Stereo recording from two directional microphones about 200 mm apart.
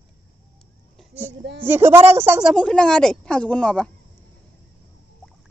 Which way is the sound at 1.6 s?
10° right (ahead or behind).